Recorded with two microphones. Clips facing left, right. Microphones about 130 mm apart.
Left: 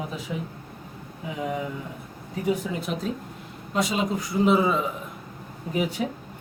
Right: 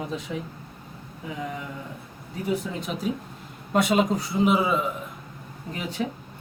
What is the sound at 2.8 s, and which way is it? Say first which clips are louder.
Speech: left 1 dB; centre (ahead or behind).